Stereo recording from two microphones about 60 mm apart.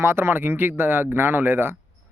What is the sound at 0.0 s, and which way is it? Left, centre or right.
A man's voice, right.